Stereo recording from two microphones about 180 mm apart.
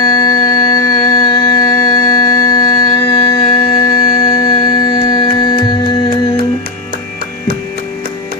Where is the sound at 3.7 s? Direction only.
25° left (ahead or behind).